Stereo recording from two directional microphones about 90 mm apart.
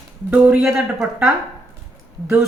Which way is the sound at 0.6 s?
5° right (ahead or behind).